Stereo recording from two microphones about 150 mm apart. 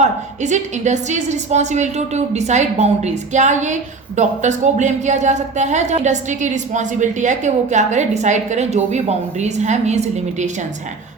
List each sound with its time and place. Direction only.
0.0 s speech: 50° right (ahead or behind)